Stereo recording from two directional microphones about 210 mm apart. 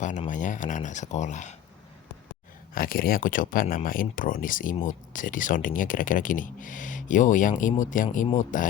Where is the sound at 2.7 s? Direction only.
45° left (ahead or behind).